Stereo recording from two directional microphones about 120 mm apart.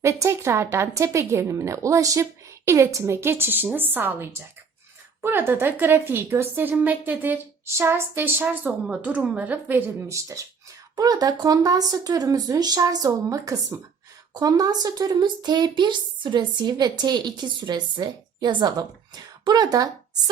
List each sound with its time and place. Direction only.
0.0 s a woman's voice: 25° right (ahead or behind)